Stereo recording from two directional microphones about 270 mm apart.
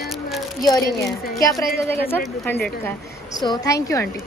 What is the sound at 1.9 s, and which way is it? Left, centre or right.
A woman's voice, centre.